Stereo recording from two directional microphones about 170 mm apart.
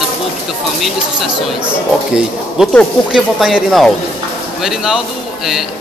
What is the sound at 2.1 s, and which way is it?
Speech, 5° right (ahead or behind).